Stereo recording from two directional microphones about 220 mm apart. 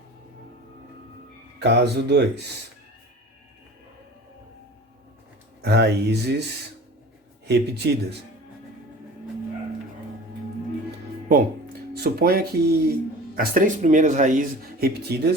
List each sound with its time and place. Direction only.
1.5 s speech: 50° right (ahead or behind)
5.6 s speech: 50° right (ahead or behind)
7.4 s speech: 50° right (ahead or behind)
11.3 s speech: 45° right (ahead or behind)